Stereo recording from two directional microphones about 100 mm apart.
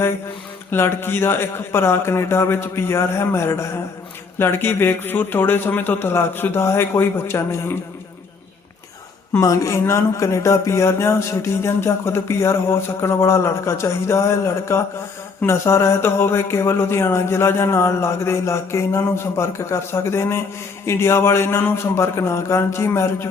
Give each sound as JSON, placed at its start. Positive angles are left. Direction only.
{"t": 0.7, "sound": "speech", "side_deg": 25}
{"t": 9.4, "sound": "speech", "side_deg": 35}